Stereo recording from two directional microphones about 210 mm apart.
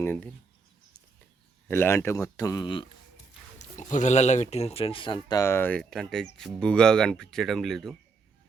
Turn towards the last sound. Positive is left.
turn(degrees=0)  # may be behind; listen again after turning